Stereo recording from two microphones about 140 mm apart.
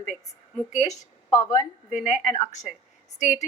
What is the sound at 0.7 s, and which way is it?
Speech, 55° left (ahead or behind).